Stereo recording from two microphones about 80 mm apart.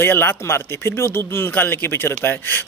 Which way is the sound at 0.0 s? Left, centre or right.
Left.